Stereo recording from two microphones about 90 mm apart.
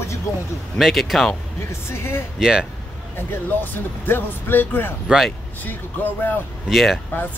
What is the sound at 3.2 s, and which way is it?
Speech, 25° left (ahead or behind).